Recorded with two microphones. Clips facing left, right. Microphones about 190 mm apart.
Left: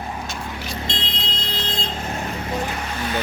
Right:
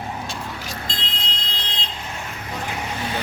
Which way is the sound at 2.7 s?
15° right (ahead or behind).